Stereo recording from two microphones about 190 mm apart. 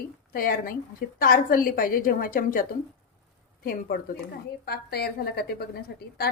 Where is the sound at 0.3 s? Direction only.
50° left (ahead or behind).